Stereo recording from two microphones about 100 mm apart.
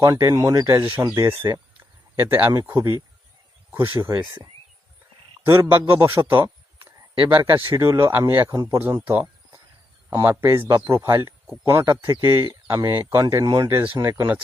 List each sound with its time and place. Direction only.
0.0 s speech: 35° right (ahead or behind)
1.8 s a sound: 20° right (ahead or behind)
3.8 s speech: 35° right (ahead or behind)
5.5 s speech: 25° right (ahead or behind)
8.4 s speech: 35° right (ahead or behind)